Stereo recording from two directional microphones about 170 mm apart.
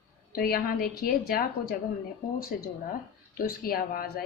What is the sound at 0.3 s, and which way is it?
A woman's voice, 60° left (ahead or behind).